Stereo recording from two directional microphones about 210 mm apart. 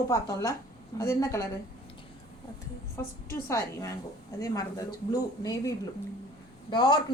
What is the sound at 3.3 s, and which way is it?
Speech, 15° left (ahead or behind).